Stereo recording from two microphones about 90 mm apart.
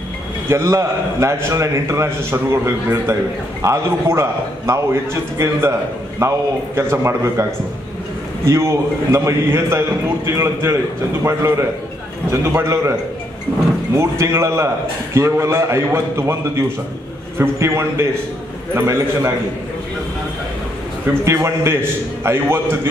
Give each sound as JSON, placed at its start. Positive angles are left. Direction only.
{"t": 0.5, "sound": "a man's voice", "side_deg": -30}
{"t": 8.5, "sound": "a man's voice", "side_deg": -35}
{"t": 13.9, "sound": "a man's voice", "side_deg": -30}
{"t": 21.1, "sound": "a man's voice", "side_deg": -30}